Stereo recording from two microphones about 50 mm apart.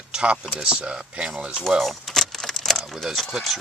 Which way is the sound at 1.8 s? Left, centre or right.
Centre.